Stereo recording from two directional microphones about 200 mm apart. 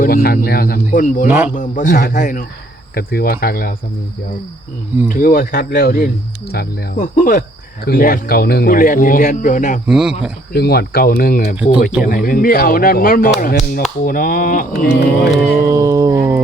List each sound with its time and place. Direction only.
0.0 s speech: 50° left (ahead or behind)
1.3 s a man's voice: 10° right (ahead or behind)
1.5 s speech: 40° left (ahead or behind)
5.0 s speech: 45° left (ahead or behind)
9.8 s speech: 5° right (ahead or behind)
10.5 s speech: 55° left (ahead or behind)
15.4 s a sound: 15° right (ahead or behind)